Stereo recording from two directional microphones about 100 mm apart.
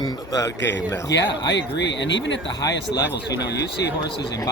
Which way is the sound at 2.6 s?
35° left (ahead or behind).